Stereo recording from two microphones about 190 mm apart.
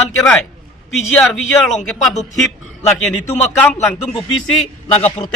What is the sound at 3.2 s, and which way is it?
Speech, 10° left (ahead or behind).